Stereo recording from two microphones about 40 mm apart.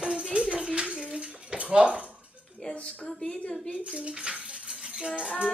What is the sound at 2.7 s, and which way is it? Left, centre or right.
Speech, left.